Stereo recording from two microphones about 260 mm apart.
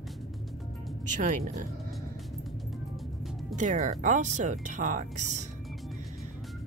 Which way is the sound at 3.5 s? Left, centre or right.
Right.